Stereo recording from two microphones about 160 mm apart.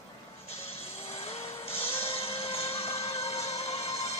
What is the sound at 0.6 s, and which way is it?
Music, 40° left (ahead or behind).